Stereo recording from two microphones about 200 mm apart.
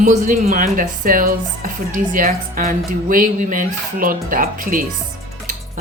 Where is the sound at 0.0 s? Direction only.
40° right (ahead or behind).